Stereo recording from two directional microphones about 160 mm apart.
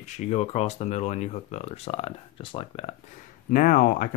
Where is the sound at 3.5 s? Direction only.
55° left (ahead or behind).